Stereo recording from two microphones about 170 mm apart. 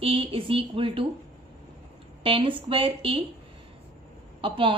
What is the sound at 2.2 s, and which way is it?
A woman's voice, 30° right (ahead or behind).